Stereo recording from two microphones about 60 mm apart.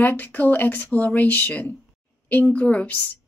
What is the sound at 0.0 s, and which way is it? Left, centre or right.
Speech, left.